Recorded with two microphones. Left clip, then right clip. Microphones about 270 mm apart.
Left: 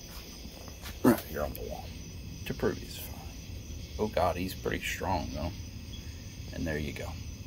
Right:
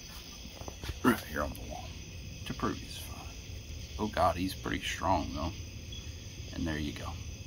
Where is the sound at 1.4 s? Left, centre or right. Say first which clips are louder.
Left 1 dB; centre.